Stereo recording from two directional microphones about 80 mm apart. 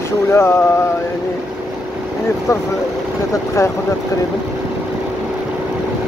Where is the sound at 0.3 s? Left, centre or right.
Left.